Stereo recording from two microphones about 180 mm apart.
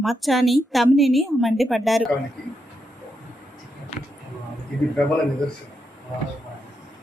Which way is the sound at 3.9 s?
35° left (ahead or behind).